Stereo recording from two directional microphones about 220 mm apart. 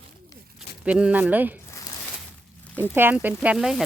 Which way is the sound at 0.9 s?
5° right (ahead or behind).